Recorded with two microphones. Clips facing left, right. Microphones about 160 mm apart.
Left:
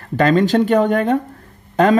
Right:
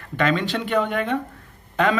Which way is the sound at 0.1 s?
40° left (ahead or behind).